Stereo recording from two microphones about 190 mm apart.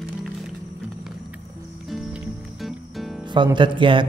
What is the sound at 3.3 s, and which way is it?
Speech, 25° right (ahead or behind).